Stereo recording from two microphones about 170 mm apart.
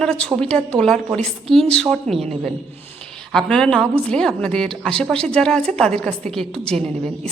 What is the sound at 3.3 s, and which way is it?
A woman's voice, 5° left (ahead or behind).